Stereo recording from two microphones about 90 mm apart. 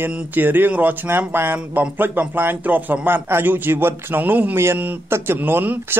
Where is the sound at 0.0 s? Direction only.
20° right (ahead or behind).